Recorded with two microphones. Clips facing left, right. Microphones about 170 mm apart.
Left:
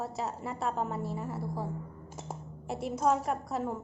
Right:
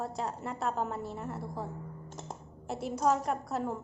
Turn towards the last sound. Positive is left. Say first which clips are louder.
# even
turn(degrees=0)  # may be behind; listen again after turning